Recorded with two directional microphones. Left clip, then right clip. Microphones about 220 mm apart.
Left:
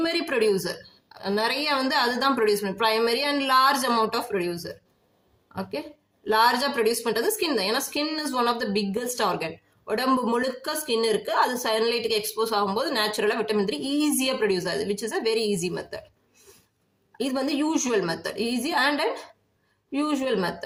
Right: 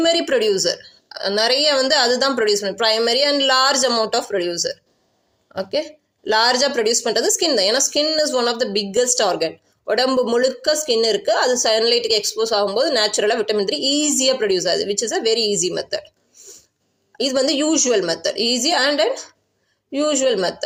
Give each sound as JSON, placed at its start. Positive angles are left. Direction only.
{"t": 0.0, "sound": "a woman's voice", "side_deg": -10}
{"t": 6.2, "sound": "a woman's voice", "side_deg": -15}
{"t": 17.2, "sound": "a woman's voice", "side_deg": -10}